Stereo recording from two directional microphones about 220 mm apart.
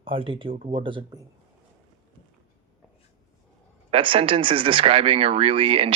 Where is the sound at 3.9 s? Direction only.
25° right (ahead or behind).